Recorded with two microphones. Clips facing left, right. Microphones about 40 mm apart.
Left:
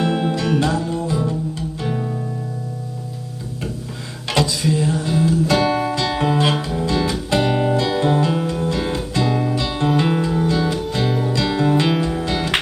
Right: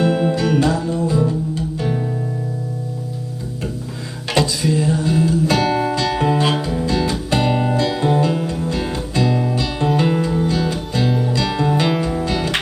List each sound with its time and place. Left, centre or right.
0.0 s music: centre
4.3 s music: centre
12.2 s music: centre